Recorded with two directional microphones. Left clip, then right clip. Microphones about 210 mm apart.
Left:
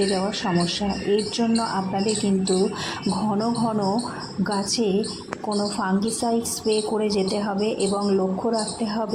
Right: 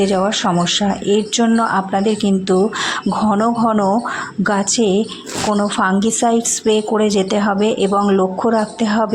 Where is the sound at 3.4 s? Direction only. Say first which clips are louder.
Right 9 dB; 25° right (ahead or behind).